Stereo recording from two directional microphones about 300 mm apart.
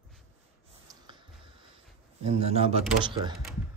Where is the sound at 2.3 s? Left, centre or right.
Right.